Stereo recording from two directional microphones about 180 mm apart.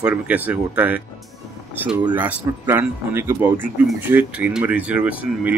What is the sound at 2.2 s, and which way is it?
Speech, 10° right (ahead or behind).